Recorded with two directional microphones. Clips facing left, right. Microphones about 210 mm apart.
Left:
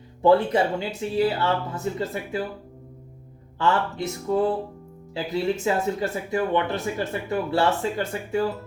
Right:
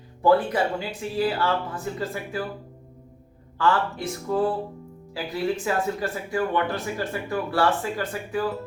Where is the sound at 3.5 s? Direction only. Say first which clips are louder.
Even; 20° left (ahead or behind).